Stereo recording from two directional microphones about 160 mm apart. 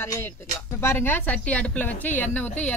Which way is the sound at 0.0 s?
15° left (ahead or behind).